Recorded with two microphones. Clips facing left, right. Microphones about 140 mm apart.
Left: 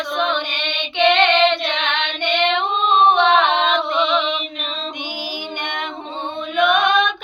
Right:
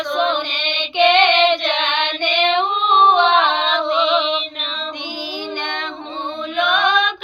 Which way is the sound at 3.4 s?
15° left (ahead or behind).